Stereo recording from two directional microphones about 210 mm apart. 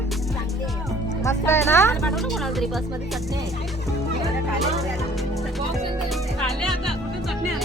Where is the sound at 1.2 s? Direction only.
10° left (ahead or behind).